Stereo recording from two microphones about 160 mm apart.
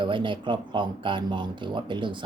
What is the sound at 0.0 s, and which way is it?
Speech, 30° right (ahead or behind).